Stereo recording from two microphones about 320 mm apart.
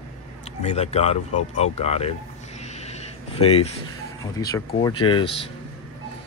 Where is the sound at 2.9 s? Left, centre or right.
Centre.